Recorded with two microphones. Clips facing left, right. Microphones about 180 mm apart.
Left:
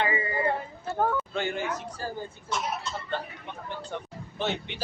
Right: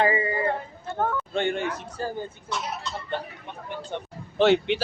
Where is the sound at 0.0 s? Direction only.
30° right (ahead or behind).